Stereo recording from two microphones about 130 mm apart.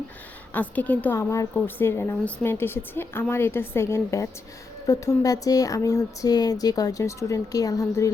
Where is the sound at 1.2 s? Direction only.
25° left (ahead or behind).